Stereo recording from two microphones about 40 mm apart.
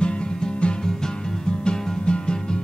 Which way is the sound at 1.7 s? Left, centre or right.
Left.